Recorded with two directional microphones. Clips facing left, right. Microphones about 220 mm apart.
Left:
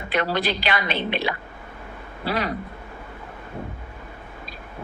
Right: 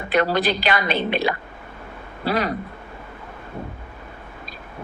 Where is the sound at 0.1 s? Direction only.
45° right (ahead or behind).